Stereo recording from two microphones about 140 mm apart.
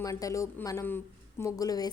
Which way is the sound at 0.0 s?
25° left (ahead or behind).